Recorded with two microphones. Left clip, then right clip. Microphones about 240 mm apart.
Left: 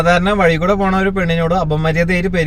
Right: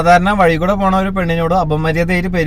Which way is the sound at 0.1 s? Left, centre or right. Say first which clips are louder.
Right 4 dB; centre.